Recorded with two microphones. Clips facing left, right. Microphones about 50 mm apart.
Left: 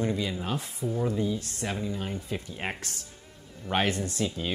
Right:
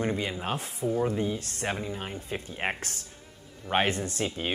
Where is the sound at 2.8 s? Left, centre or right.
Right.